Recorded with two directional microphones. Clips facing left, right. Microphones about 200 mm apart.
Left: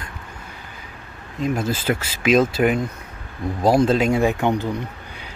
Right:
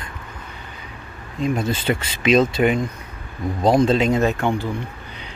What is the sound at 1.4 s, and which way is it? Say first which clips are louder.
Speech: right 1 dB; 5° left (ahead or behind).